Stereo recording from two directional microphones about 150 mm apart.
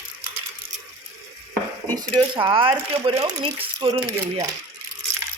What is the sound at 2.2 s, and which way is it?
A woman's voice, 35° right (ahead or behind).